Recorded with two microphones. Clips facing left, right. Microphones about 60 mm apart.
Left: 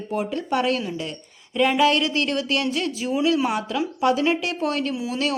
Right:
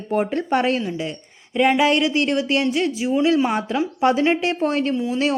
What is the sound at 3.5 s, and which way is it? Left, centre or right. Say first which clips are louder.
A woman's voice: right 3 dB; right.